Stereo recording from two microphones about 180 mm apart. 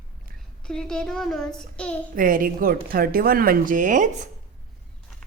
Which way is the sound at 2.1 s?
50° right (ahead or behind).